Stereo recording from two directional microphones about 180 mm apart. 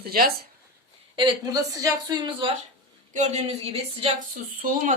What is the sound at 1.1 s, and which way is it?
Speech, 25° right (ahead or behind).